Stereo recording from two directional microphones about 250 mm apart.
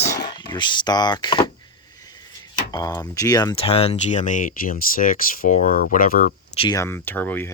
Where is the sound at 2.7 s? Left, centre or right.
Centre; by 6.3 s left.